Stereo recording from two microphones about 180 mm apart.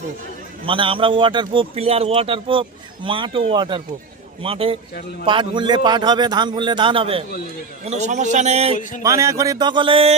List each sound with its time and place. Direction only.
0.6 s a man's voice: 30° right (ahead or behind)
9.0 s a man's voice: 15° right (ahead or behind)